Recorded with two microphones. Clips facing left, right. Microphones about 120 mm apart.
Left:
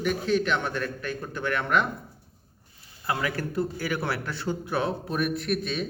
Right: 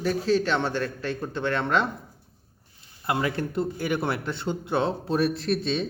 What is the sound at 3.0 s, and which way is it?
A man's voice, 25° right (ahead or behind).